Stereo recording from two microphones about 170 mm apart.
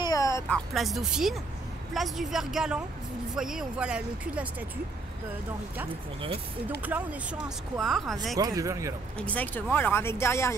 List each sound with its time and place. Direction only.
0.0 s music: 20° left (ahead or behind)
0.5 s speech: centre (ahead or behind)
6.8 s speech: 10° right (ahead or behind)
8.4 s speech: 20° right (ahead or behind)
9.2 s speech: 10° left (ahead or behind)